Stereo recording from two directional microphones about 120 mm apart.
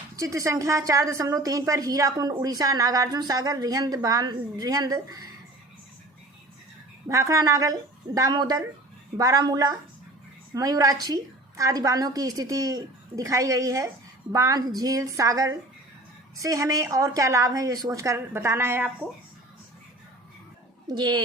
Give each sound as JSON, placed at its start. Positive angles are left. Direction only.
{"t": 0.2, "sound": "a woman's voice", "side_deg": -25}
{"t": 7.1, "sound": "a woman's voice", "side_deg": -25}
{"t": 20.8, "sound": "speech", "side_deg": -35}